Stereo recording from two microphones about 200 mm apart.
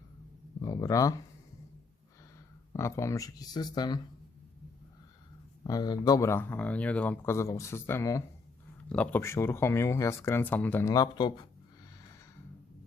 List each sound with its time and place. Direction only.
0.6 s speech: 15° left (ahead or behind)
2.7 s speech: 15° left (ahead or behind)
5.6 s speech: 20° left (ahead or behind)